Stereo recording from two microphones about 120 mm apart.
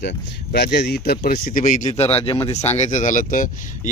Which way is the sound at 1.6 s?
90° left.